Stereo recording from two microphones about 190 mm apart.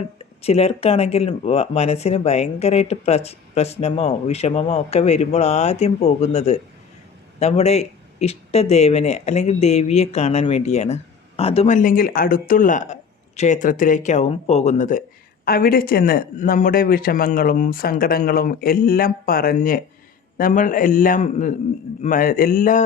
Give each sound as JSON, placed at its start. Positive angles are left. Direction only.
{"t": 0.4, "sound": "speech", "side_deg": 30}